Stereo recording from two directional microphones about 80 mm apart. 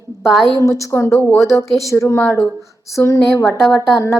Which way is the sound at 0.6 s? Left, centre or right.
Left.